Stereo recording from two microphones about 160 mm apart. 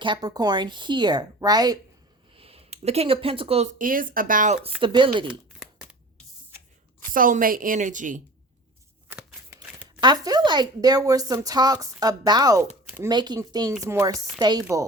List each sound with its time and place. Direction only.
0.0 s speech: 25° right (ahead or behind)
2.4 s speech: 40° right (ahead or behind)
3.8 s a woman's voice: 60° right (ahead or behind)
4.8 s speech: 30° right (ahead or behind)
5.3 s a sound: 5° right (ahead or behind)
7.1 s a woman's voice: 60° right (ahead or behind)
9.6 s speech: 25° right (ahead or behind)